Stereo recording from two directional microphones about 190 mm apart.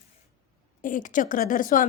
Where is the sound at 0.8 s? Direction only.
45° left (ahead or behind).